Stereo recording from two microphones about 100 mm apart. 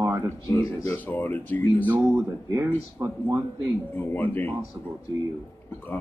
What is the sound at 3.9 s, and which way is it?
Speech, 20° left (ahead or behind).